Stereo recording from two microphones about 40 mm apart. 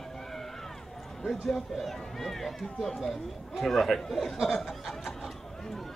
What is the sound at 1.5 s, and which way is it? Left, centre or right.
Speech, centre.